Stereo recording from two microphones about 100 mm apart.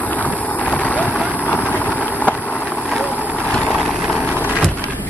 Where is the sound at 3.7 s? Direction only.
5° right (ahead or behind).